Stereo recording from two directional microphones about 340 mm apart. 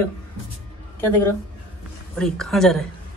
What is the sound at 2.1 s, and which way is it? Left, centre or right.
Speech, centre.